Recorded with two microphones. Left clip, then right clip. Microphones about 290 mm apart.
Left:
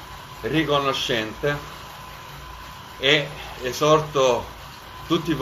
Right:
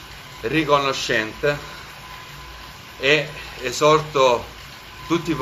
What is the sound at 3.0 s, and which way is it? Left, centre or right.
Speech, right.